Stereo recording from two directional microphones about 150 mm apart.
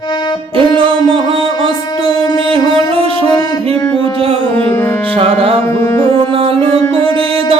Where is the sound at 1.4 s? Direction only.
25° left (ahead or behind).